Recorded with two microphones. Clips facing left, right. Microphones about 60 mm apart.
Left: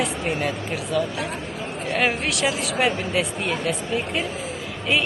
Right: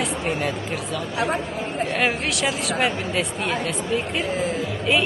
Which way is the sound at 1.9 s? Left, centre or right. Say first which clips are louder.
Left 3 dB; centre.